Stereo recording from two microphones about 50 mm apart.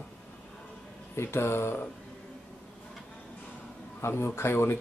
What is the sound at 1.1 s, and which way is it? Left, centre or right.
Speech, left.